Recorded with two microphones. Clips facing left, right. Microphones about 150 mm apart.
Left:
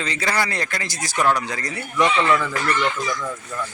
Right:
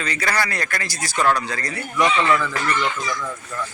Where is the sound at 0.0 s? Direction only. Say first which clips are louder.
Even; 25° left (ahead or behind).